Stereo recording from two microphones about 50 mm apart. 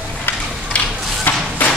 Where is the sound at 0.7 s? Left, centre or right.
Left.